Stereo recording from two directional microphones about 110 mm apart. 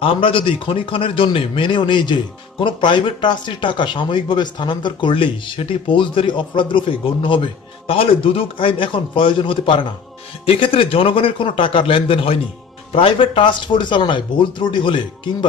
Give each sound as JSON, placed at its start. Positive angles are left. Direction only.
{"t": 0.0, "sound": "speech", "side_deg": 55}
{"t": 10.4, "sound": "speech", "side_deg": 60}